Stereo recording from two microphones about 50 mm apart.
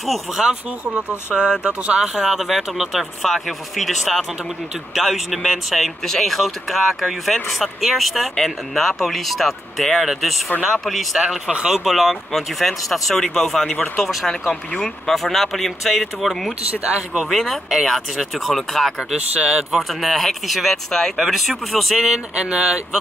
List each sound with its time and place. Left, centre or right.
0.0 s speech: centre
0.5 s speech: right
2.1 s speech: centre
16.8 s speech: right
17.3 s speech: centre
19.1 s speech: centre
19.8 s speech: centre
22.0 s speech: centre